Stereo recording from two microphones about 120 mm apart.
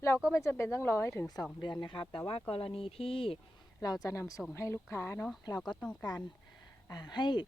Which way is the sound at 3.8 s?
30° left (ahead or behind).